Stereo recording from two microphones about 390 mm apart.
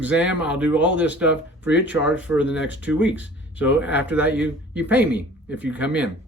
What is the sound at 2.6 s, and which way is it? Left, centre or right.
Speech, left.